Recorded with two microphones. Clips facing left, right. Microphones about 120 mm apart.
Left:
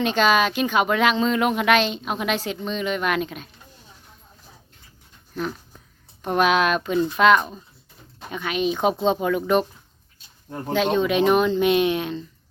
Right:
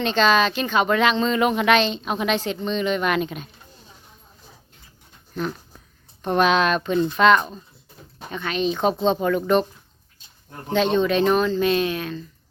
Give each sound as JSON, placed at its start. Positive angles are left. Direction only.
{"t": 0.0, "sound": "speech", "side_deg": 10}
{"t": 5.3, "sound": "speech", "side_deg": 0}
{"t": 10.7, "sound": "speech", "side_deg": 10}